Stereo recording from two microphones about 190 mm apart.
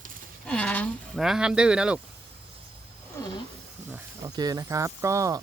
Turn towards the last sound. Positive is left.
turn(degrees=-15)  # may be behind; listen again after turning